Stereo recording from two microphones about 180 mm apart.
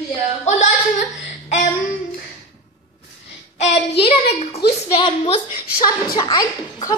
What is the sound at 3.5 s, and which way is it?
Child singing, 40° left (ahead or behind).